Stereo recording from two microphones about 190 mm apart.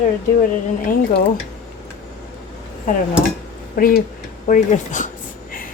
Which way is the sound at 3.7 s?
50° left (ahead or behind).